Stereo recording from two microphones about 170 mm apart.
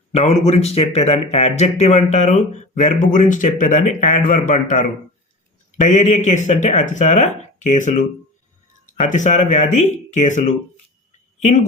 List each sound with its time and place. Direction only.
0.1 s speech: 40° left (ahead or behind)